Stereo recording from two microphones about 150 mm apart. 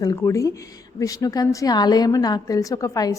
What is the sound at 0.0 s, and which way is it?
A woman's voice, 20° left (ahead or behind).